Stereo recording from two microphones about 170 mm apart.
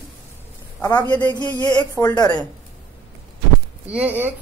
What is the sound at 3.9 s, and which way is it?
Speech, 10° right (ahead or behind).